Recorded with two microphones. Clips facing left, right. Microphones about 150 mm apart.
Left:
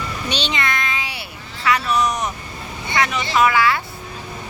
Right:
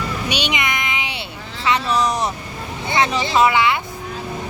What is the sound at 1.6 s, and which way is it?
Speech, 30° right (ahead or behind).